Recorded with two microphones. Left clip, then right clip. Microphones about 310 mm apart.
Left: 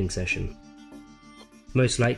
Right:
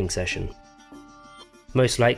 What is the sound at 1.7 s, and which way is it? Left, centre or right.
Speech, right.